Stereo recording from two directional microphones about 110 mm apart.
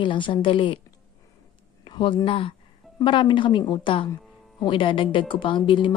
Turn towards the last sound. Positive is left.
turn(degrees=50)  # may be behind; listen again after turning